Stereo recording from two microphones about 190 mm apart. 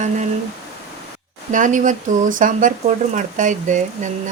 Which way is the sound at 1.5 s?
40° right (ahead or behind).